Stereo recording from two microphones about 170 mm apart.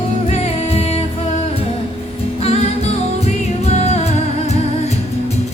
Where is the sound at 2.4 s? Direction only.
40° left (ahead or behind).